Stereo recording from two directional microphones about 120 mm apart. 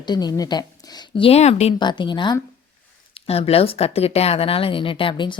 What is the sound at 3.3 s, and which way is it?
A woman's voice, 55° left (ahead or behind).